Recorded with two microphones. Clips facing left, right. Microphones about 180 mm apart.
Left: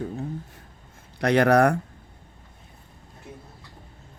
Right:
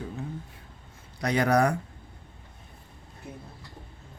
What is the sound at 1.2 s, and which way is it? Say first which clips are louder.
Speech: left 5 dB; 65° left (ahead or behind).